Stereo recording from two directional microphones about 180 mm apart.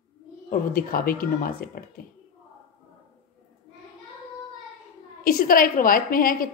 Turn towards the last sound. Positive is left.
turn(degrees=50)  # may be behind; listen again after turning